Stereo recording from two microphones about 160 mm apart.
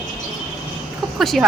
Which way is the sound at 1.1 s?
Centre (ahead or behind).